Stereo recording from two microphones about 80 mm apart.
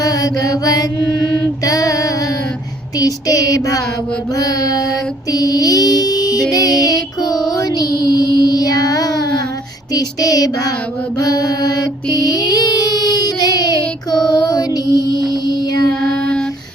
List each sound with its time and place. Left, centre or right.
0.0 s mantra: left
1.6 s female singing: left
3.0 s child singing: left
6.5 s music: left
9.9 s child singing: left
15.9 s child singing: centre